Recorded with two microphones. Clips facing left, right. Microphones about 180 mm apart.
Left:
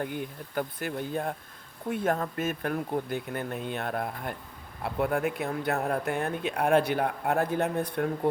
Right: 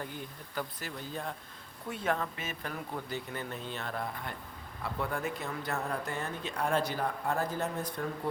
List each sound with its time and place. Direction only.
0.0 s speech: 60° left (ahead or behind)